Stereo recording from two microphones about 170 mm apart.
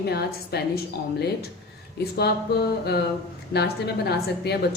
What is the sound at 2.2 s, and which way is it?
A woman's voice, 70° left (ahead or behind).